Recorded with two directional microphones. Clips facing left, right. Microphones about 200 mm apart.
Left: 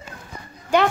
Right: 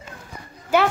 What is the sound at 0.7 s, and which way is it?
Speech, 5° right (ahead or behind).